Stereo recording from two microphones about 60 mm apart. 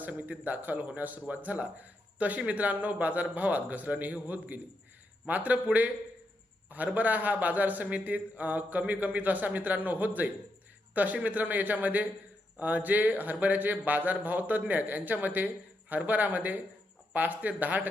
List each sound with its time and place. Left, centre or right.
0.0 s speech: right